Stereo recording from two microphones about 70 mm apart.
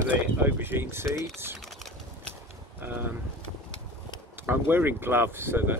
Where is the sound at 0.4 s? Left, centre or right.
Right.